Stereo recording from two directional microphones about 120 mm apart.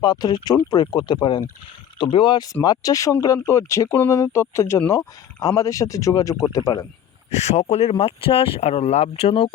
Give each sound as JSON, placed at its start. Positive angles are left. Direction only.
{"t": 0.0, "sound": "speech", "side_deg": 35}
{"t": 7.3, "sound": "speech", "side_deg": 65}